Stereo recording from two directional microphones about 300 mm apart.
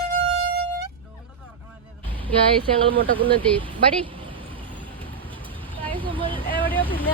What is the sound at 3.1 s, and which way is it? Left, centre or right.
Wind instrument, centre.